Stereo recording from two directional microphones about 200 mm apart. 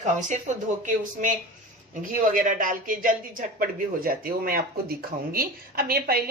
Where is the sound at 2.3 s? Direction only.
40° right (ahead or behind).